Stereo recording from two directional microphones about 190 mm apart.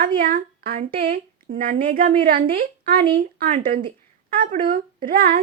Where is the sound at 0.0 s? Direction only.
50° right (ahead or behind).